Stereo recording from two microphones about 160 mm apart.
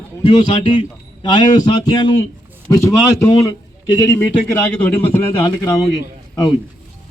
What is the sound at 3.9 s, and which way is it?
Speech, 20° left (ahead or behind).